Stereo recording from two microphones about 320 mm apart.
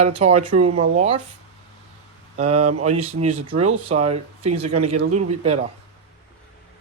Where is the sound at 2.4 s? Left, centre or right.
Centre.